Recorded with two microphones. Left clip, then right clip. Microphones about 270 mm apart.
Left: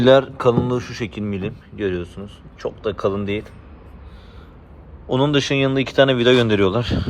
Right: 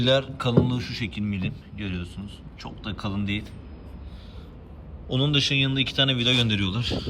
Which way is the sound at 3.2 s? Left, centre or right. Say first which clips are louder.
Left 6 dB; centre.